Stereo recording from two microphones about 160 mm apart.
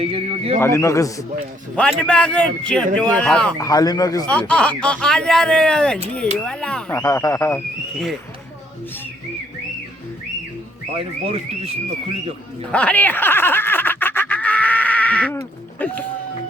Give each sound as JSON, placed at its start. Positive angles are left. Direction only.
{"t": 0.0, "sound": "speech", "side_deg": -40}
{"t": 0.6, "sound": "a man's voice", "side_deg": 20}
{"t": 1.7, "sound": "a man's voice", "side_deg": 5}
{"t": 3.6, "sound": "a man's voice", "side_deg": 25}
{"t": 4.3, "sound": "a man's voice", "side_deg": 5}
{"t": 7.0, "sound": "a man's voice", "side_deg": 20}
{"t": 10.9, "sound": "speech", "side_deg": -40}
{"t": 12.7, "sound": "a sound", "side_deg": 10}
{"t": 15.8, "sound": "speech", "side_deg": 10}